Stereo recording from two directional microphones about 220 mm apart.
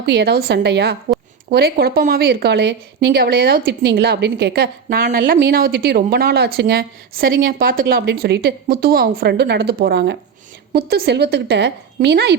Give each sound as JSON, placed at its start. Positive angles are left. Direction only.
{"t": 0.0, "sound": "a woman's voice", "side_deg": -50}